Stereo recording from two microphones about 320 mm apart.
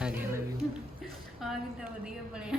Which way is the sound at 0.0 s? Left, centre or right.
Centre.